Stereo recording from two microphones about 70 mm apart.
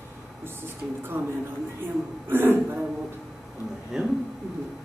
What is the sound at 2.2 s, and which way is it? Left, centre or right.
Speech, right.